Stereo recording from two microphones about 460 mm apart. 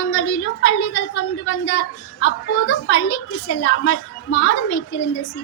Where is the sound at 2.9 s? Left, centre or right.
Left.